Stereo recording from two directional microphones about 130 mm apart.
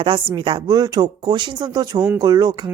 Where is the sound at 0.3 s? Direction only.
40° right (ahead or behind).